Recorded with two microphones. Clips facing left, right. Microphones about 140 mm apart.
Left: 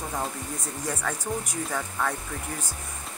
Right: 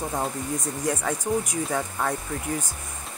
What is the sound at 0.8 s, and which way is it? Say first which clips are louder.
Speech: right 4 dB; 15° right (ahead or behind).